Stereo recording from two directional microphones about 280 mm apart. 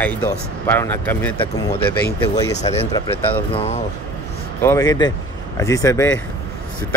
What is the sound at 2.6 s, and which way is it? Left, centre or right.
Speech, left.